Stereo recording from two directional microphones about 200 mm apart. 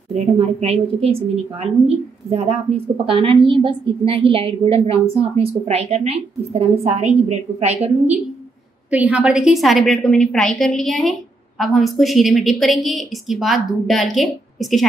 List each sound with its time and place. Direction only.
0.1 s a woman's voice: 30° right (ahead or behind)
8.9 s a woman's voice: 5° right (ahead or behind)